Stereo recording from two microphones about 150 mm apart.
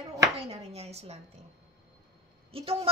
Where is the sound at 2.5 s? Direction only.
40° right (ahead or behind).